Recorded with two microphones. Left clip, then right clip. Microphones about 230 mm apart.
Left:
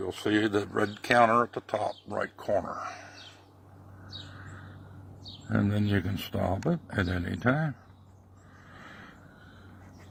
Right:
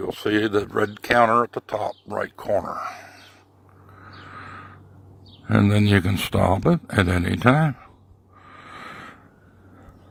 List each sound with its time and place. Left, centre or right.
0.1 s speech: right
5.5 s speech: right